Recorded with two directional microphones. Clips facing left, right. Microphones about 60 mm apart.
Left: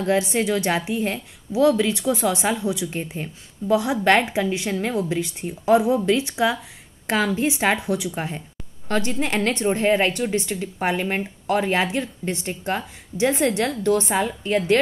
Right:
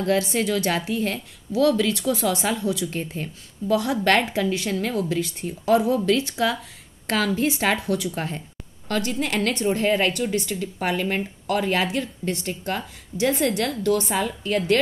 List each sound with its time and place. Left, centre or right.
0.0 s a woman's voice: left
8.8 s a woman's voice: left